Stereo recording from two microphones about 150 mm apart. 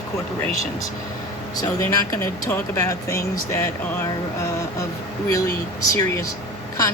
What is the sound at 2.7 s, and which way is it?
Speech, 20° left (ahead or behind).